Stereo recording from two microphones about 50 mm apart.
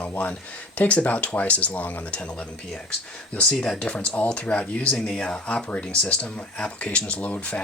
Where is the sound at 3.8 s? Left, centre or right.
Left.